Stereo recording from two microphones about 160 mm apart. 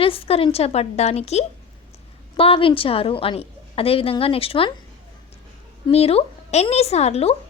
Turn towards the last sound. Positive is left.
turn(degrees=40)  # may be behind; listen again after turning